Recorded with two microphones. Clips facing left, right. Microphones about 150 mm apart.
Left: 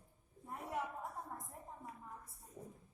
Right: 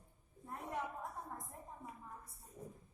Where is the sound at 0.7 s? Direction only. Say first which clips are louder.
Left 1 dB; centre (ahead or behind).